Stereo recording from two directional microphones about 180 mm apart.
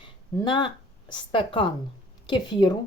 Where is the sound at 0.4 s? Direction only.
25° left (ahead or behind).